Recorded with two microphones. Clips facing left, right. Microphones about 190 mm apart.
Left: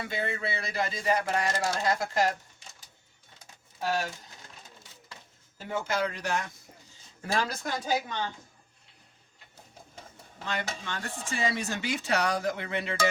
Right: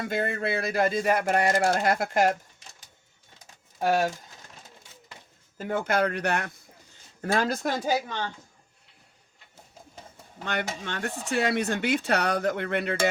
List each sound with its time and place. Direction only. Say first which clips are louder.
0.1 s speech: right 6 dB; 50° right (ahead or behind)
3.8 s speech: right 6 dB; 55° right (ahead or behind)
5.5 s speech: right 5 dB; 55° right (ahead or behind)
6.9 s a sound: right 4 dB; 55° right (ahead or behind)
10.4 s speech: right 3 dB; 65° right (ahead or behind)